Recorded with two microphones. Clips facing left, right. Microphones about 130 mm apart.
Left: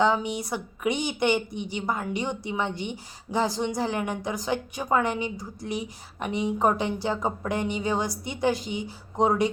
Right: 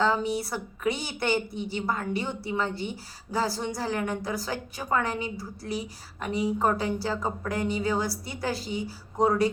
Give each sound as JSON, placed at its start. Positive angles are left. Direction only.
{"t": 0.0, "sound": "a woman's voice", "side_deg": 15}